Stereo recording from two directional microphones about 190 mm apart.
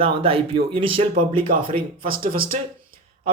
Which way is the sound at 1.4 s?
50° right (ahead or behind).